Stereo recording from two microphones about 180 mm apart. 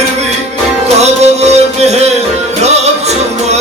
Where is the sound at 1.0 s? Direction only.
35° right (ahead or behind).